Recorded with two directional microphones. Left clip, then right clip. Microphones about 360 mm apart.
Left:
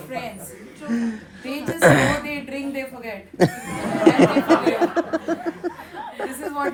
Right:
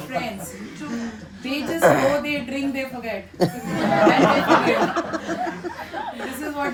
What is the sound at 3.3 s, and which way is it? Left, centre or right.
Speech, left.